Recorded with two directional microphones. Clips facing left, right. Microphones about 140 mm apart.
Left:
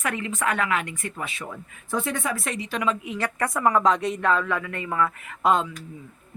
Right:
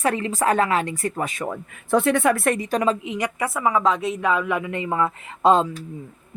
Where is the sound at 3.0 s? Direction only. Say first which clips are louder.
Right 2 dB; 15° right (ahead or behind).